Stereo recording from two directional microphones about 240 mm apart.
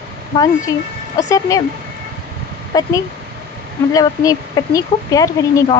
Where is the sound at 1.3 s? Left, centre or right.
Centre.